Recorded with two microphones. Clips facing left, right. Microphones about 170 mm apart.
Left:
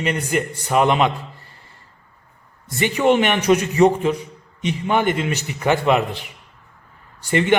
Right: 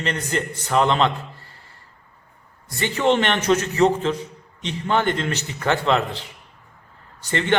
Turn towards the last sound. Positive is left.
turn(degrees=10)  # may be behind; listen again after turning